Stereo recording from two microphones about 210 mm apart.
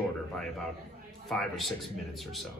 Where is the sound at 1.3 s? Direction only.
Centre (ahead or behind).